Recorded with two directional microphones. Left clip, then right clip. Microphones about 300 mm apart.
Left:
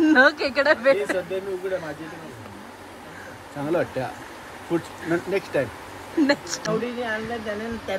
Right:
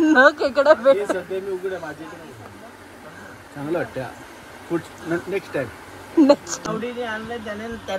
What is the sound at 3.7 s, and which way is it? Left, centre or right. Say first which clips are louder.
Speech: left 1 dB; centre.